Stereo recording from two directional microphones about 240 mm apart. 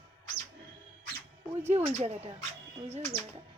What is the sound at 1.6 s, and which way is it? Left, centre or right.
Speech, right.